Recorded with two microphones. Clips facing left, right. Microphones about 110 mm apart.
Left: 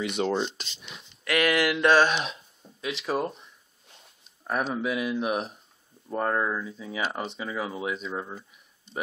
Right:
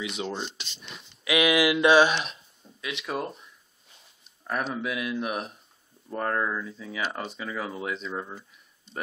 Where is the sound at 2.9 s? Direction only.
35° left (ahead or behind).